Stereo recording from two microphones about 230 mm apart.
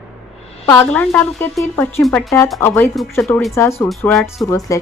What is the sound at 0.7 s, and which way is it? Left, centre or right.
A woman's voice, centre.